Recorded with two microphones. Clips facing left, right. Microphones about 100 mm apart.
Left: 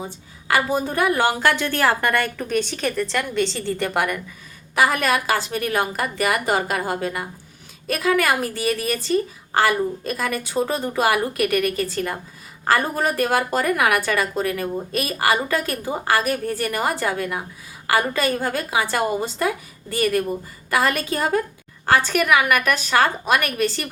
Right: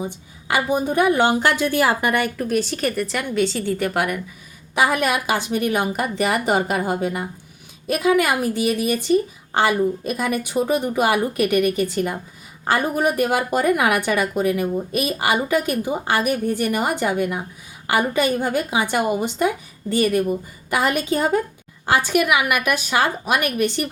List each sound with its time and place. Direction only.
0.4 s a woman's voice: 20° right (ahead or behind)
2.4 s a woman's voice: 5° right (ahead or behind)
4.7 s a woman's voice: 20° right (ahead or behind)